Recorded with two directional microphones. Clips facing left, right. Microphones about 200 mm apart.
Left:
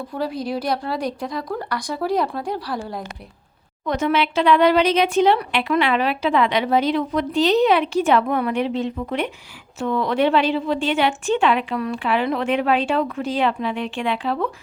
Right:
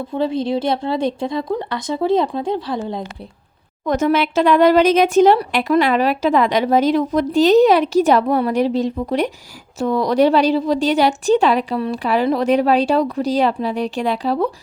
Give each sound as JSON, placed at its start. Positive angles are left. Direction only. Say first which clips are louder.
{"t": 0.1, "sound": "speech", "louder": "right 6 dB", "side_deg": -25}
{"t": 3.8, "sound": "speech", "louder": "right 4 dB", "side_deg": -45}